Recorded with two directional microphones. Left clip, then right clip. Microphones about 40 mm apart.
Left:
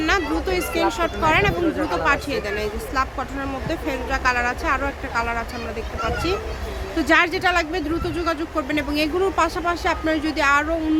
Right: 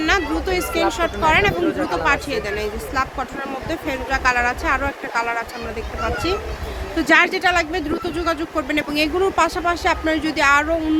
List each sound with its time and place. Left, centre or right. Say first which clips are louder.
0.0 s speech: right 2 dB; centre
4.1 s a woman's voice: right 3 dB; centre
6.9 s speech: right 3 dB; centre
8.1 s a woman's voice: right 3 dB; centre